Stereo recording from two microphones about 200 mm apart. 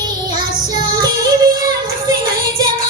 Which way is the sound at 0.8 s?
20° right (ahead or behind).